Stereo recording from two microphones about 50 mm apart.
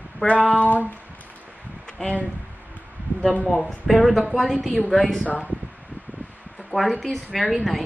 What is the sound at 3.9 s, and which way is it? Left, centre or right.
A woman's voice, centre.